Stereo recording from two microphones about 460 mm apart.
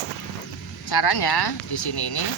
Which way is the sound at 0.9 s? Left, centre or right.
Left.